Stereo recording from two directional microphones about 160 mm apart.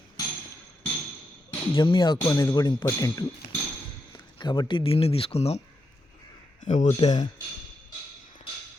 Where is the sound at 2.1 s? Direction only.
20° left (ahead or behind); by 5.6 s 40° left (ahead or behind).